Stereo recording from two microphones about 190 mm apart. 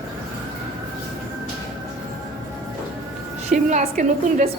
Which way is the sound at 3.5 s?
45° right (ahead or behind).